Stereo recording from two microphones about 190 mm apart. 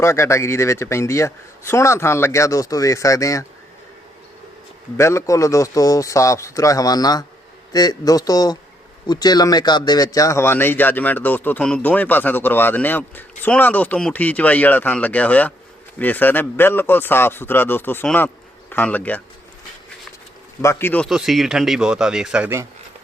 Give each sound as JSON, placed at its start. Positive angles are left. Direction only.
{"t": 0.0, "sound": "speech", "side_deg": 15}
{"t": 4.9, "sound": "speech", "side_deg": 15}
{"t": 20.6, "sound": "speech", "side_deg": 15}
{"t": 21.1, "sound": "a man's voice", "side_deg": 0}